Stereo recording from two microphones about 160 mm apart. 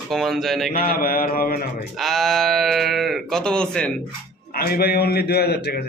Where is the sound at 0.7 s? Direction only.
65° left (ahead or behind).